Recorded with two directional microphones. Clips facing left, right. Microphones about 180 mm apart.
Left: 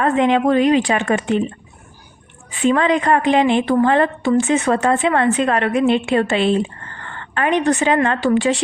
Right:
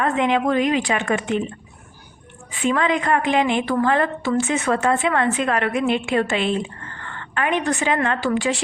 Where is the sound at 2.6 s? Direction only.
35° left (ahead or behind).